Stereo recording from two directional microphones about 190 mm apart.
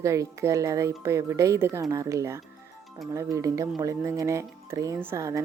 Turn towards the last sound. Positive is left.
turn(degrees=-15)  # may be behind; listen again after turning